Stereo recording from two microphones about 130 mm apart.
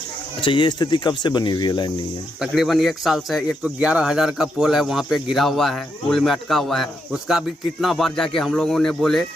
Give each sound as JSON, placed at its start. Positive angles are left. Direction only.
{"t": 0.4, "sound": "speech", "side_deg": 40}
{"t": 2.4, "sound": "speech", "side_deg": 0}